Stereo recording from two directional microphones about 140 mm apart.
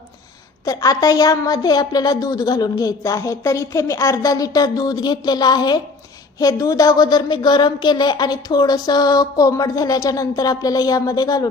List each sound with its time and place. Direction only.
0.7 s a woman's voice: 25° left (ahead or behind)